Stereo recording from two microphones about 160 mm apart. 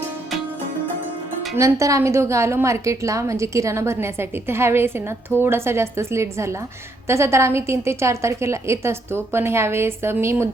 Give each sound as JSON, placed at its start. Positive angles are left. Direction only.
{"t": 1.5, "sound": "a woman's voice", "side_deg": -20}